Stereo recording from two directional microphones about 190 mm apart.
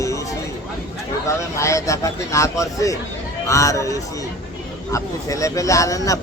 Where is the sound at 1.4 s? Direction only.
15° left (ahead or behind).